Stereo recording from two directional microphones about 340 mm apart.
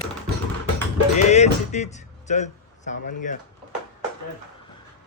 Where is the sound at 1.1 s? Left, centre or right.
Centre.